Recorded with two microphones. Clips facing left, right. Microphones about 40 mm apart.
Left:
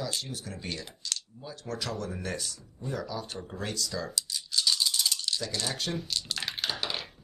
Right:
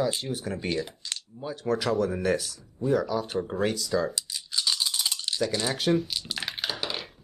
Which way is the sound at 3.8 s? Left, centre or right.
Centre.